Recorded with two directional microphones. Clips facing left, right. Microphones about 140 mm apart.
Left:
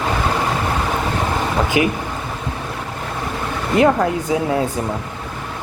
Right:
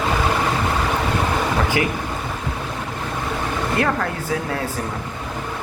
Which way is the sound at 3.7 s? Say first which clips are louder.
Left 9 dB; 20° left (ahead or behind).